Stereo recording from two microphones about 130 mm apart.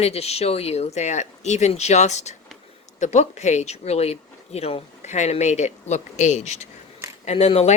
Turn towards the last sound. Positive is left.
turn(degrees=50)  # may be behind; listen again after turning